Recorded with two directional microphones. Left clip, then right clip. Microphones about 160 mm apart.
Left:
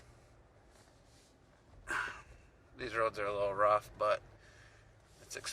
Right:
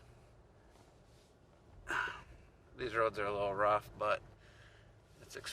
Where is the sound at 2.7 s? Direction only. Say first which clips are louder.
Even; 5° right (ahead or behind).